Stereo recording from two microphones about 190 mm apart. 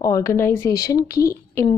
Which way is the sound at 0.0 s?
15° left (ahead or behind).